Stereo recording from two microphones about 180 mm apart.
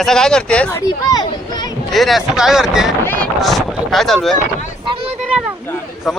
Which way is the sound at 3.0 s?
10° left (ahead or behind).